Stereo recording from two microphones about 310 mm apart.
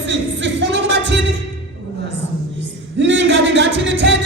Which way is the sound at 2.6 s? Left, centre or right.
Right.